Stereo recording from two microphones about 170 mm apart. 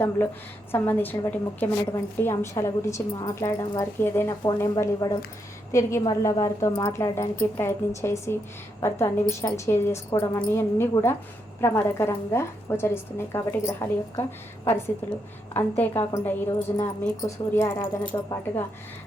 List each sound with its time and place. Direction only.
0.7 s a woman's voice: 10° left (ahead or behind)